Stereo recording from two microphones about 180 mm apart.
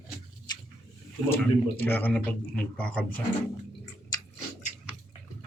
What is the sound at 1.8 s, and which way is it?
A man's voice, 10° left (ahead or behind).